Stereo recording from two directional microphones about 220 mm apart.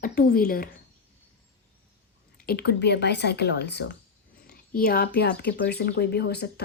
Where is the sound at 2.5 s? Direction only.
45° left (ahead or behind).